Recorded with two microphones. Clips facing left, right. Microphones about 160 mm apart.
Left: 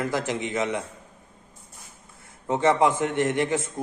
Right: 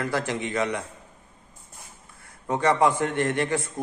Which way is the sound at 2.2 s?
20° left (ahead or behind).